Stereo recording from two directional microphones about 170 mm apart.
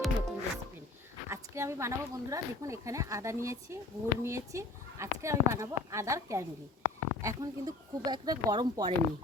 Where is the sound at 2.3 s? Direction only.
20° right (ahead or behind).